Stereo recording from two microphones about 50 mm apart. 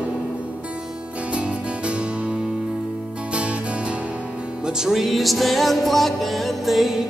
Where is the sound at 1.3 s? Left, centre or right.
Right.